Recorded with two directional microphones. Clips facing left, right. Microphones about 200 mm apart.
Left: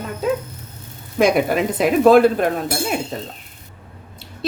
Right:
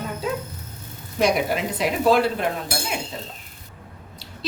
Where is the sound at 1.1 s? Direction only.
50° left (ahead or behind).